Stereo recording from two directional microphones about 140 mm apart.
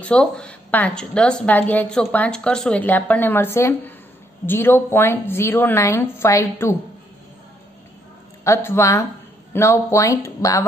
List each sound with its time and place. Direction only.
0.0 s speech: 5° left (ahead or behind)
8.5 s speech: 20° left (ahead or behind)